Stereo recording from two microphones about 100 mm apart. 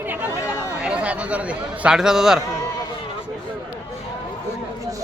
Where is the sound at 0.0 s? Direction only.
20° right (ahead or behind).